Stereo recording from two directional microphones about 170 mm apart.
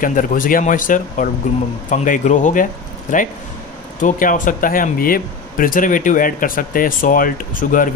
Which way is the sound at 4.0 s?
50° left (ahead or behind).